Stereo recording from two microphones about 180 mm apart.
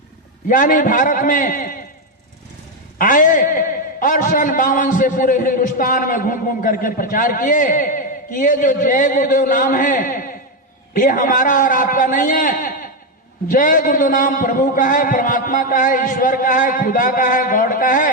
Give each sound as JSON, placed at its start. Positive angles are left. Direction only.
{"t": 0.4, "sound": "a man's voice", "side_deg": 45}
{"t": 3.0, "sound": "a man's voice", "side_deg": 45}